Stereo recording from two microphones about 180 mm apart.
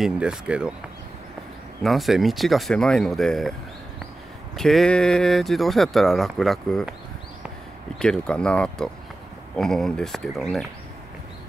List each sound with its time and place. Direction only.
0.0 s speech: 5° right (ahead or behind)
1.8 s speech: centre (ahead or behind)
4.6 s speech: centre (ahead or behind)
8.0 s speech: 5° left (ahead or behind)